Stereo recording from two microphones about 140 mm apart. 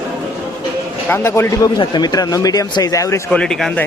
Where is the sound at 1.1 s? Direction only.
15° left (ahead or behind).